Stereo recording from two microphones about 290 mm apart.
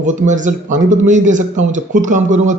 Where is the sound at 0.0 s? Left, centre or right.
Right.